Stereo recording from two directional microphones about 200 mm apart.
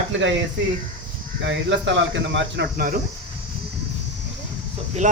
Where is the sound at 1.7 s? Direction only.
65° right (ahead or behind).